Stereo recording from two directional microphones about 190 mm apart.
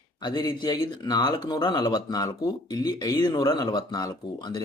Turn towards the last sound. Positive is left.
turn(degrees=20)  # may be behind; listen again after turning